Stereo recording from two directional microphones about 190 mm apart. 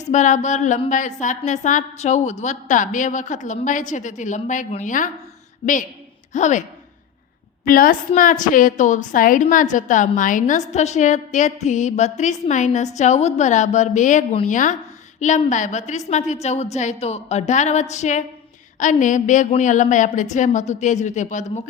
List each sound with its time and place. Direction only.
0.0 s a woman's voice: 40° left (ahead or behind)
6.3 s a woman's voice: 40° left (ahead or behind)